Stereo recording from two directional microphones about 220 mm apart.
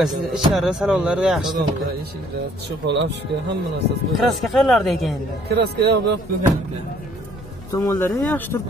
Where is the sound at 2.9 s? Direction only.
55° right (ahead or behind).